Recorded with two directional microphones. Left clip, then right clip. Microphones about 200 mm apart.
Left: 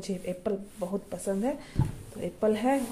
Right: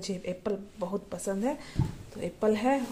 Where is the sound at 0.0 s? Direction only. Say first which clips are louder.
Left 1 dB; 5° left (ahead or behind).